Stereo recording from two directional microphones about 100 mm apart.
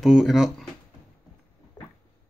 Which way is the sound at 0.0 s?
5° right (ahead or behind).